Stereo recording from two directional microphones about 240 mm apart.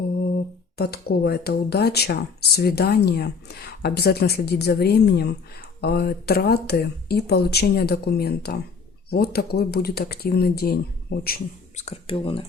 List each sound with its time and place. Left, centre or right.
0.8 s speech: left
11.8 s speech: left